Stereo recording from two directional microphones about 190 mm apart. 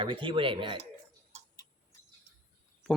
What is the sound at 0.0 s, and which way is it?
Speech, 25° right (ahead or behind).